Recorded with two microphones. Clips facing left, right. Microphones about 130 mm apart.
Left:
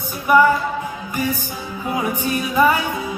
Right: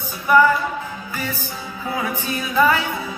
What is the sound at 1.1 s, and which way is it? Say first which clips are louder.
Music: left 6 dB; 15° left (ahead or behind).